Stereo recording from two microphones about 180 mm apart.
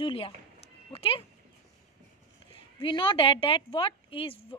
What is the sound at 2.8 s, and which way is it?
A woman's voice, 30° left (ahead or behind).